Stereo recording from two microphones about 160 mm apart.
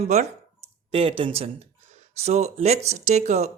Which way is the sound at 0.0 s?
45° right (ahead or behind).